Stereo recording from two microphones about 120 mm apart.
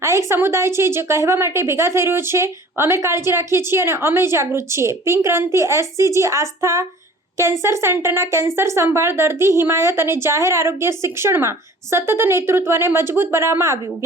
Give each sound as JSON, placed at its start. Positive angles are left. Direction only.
{"t": 0.0, "sound": "a woman's voice", "side_deg": -25}